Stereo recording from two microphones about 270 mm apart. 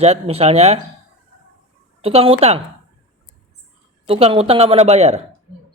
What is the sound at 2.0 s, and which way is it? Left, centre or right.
Speech, right.